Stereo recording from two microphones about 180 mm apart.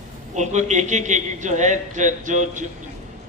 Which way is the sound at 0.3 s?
40° right (ahead or behind).